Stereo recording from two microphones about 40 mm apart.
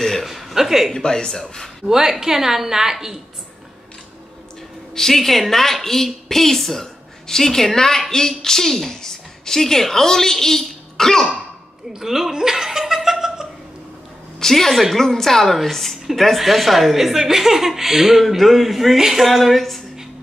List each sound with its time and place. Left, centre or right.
0.0 s a sound: centre
0.3 s a sound: centre
0.9 s a woman's voice: centre
1.9 s a woman's voice: centre
4.9 s a woman's voice: centre
11.9 s chuckle: centre
14.4 s a woman's voice: centre
14.7 s speech: centre
15.0 s a woman's voice: centre
19.2 s speech: centre